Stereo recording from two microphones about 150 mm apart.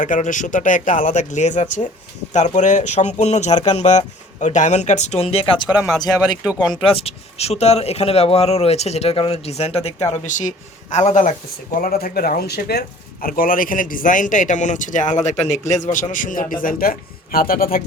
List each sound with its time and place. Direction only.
0.0 s a man's voice: 60° left (ahead or behind); by 5.6 s 40° left (ahead or behind)
6.1 s speech: 10° right (ahead or behind)
6.8 s speech: 40° left (ahead or behind)
10.1 s a man's voice: 55° left (ahead or behind)
11.8 s speech: 75° left (ahead or behind)
13.2 s a man's voice: 75° left (ahead or behind)